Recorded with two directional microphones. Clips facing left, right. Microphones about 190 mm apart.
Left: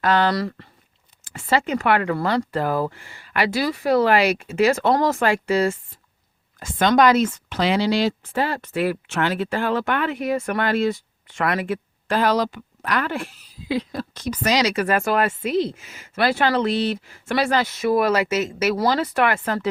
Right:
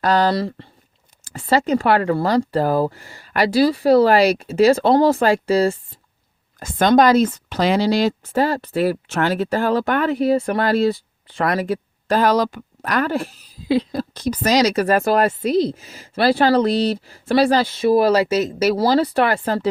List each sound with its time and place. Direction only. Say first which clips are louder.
0.0 s speech: right 2 dB; 35° right (ahead or behind)